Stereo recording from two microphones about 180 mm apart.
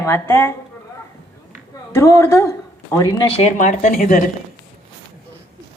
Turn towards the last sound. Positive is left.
turn(degrees=50)  # may be behind; listen again after turning